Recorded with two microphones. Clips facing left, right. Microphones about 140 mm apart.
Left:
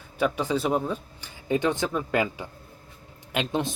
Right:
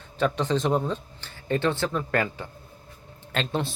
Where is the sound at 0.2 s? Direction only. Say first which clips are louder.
Right 1 dB; 10° left (ahead or behind).